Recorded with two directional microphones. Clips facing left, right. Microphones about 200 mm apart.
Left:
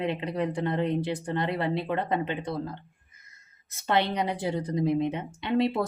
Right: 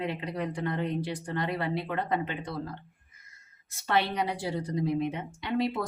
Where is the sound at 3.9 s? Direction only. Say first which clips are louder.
Left 2 dB; 20° left (ahead or behind).